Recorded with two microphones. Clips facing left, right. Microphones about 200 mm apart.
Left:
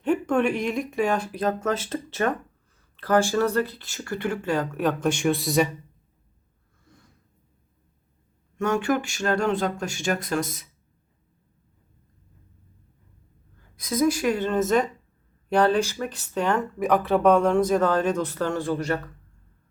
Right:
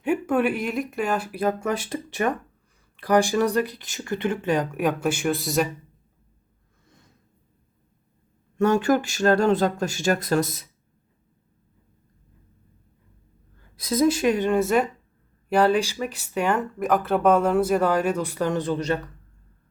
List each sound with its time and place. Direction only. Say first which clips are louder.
0.0 s speech: even; 10° right (ahead or behind)
6.8 s snort: left 2 dB; 20° right (ahead or behind)
8.5 s speech: right 4 dB; 35° right (ahead or behind)
13.7 s a woman's voice: right 2 dB; 30° right (ahead or behind)